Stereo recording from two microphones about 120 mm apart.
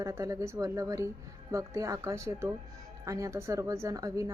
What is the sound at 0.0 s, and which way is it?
A woman's voice, 25° right (ahead or behind).